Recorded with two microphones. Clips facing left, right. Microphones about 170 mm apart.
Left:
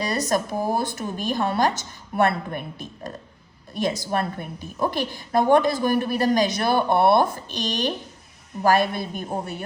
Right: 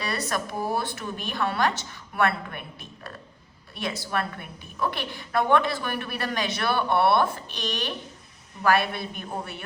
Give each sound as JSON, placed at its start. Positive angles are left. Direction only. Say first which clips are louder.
{"t": 0.0, "sound": "a woman's voice", "louder": "left 6 dB", "side_deg": 40}